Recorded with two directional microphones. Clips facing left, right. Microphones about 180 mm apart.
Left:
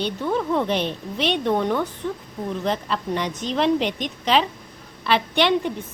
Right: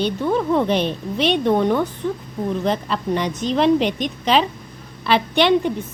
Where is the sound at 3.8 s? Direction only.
45° right (ahead or behind).